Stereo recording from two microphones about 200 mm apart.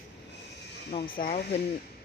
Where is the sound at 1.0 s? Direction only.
40° left (ahead or behind).